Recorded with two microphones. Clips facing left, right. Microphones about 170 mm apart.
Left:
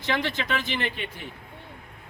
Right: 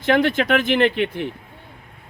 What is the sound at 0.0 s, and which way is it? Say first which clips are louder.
Speech: right 10 dB; 55° right (ahead or behind).